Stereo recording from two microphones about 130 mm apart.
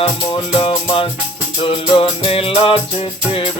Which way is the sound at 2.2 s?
45° left (ahead or behind).